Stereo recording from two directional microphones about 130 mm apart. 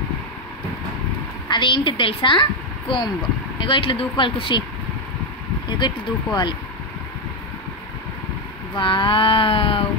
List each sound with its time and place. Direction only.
1.5 s speech: 40° left (ahead or behind)
5.7 s speech: 35° left (ahead or behind)
8.7 s speech: 40° left (ahead or behind)